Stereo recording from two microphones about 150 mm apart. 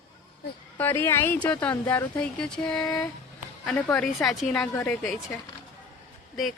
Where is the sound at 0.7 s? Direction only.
15° left (ahead or behind).